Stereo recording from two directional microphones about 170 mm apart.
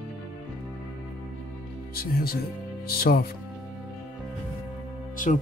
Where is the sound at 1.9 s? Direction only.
60° left (ahead or behind).